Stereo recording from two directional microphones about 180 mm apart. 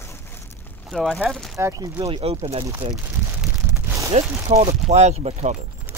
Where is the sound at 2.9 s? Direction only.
5° right (ahead or behind).